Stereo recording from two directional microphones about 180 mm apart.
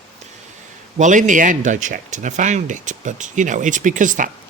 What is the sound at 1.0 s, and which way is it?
Speech, 45° right (ahead or behind).